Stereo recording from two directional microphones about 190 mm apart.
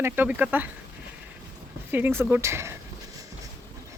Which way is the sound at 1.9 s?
10° right (ahead or behind).